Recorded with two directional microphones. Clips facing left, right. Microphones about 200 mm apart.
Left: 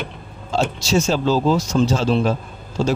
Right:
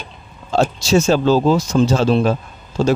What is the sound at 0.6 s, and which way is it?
Speech, 60° right (ahead or behind).